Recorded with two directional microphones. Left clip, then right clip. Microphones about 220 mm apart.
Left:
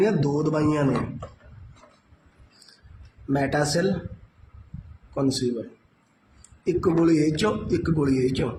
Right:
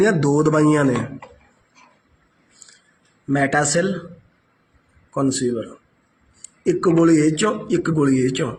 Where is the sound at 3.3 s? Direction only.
10° right (ahead or behind).